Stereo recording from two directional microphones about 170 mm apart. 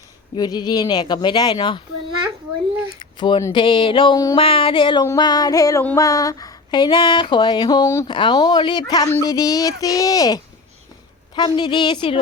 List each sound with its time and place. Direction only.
0.3 s speech: 25° left (ahead or behind)
3.2 s speech: 25° left (ahead or behind)
4.4 s a sound: 30° left (ahead or behind)
5.0 s speech: 25° left (ahead or behind)